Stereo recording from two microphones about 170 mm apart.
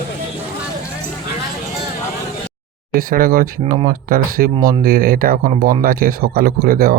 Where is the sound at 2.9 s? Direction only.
60° right (ahead or behind).